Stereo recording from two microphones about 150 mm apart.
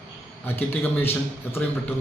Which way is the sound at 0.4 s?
15° left (ahead or behind).